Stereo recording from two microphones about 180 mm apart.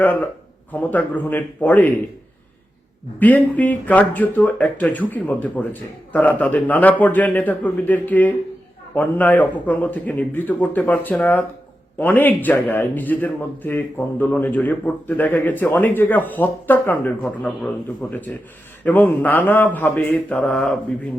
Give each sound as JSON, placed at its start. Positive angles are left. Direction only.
{"t": 0.0, "sound": "a man's voice", "side_deg": 10}
{"t": 3.2, "sound": "a man's voice", "side_deg": 10}
{"t": 18.9, "sound": "a man's voice", "side_deg": 10}